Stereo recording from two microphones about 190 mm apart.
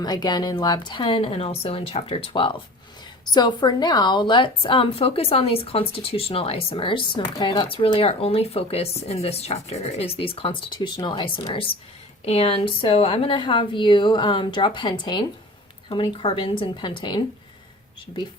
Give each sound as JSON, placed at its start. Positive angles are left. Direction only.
{"t": 0.0, "sound": "a woman's voice", "side_deg": 20}